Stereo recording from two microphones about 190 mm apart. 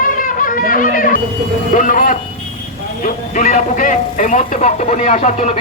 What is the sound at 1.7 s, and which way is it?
Speech, 45° left (ahead or behind).